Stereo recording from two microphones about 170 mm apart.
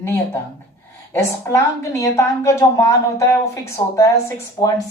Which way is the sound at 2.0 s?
15° left (ahead or behind).